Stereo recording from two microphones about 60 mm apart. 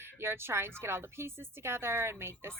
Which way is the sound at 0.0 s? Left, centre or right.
Right.